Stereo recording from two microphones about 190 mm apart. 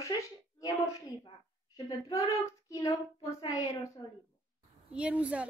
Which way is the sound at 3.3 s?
20° left (ahead or behind).